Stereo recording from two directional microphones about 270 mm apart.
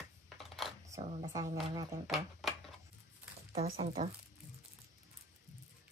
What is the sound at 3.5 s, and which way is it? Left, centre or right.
Speech, right.